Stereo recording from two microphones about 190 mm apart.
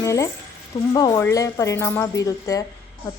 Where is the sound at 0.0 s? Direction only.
15° left (ahead or behind).